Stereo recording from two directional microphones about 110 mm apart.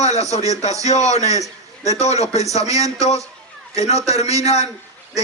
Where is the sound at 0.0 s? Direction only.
90° left.